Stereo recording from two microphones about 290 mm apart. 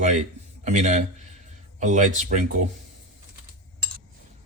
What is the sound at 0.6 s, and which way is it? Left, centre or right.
A man's voice, right.